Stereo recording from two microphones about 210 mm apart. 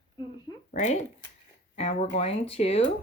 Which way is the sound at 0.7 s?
35° left (ahead or behind).